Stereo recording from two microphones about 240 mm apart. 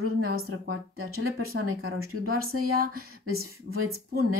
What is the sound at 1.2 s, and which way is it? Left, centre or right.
Speech, right.